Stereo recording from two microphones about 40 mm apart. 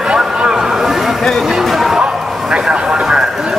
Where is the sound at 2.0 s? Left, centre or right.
Right.